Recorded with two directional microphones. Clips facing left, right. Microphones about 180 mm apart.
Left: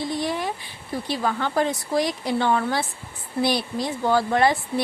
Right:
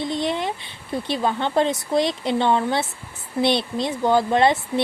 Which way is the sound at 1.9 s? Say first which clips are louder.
Right 2 dB; 25° right (ahead or behind).